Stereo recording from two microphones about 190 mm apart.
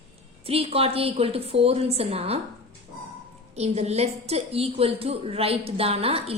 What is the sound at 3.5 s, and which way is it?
A woman's voice, 35° right (ahead or behind).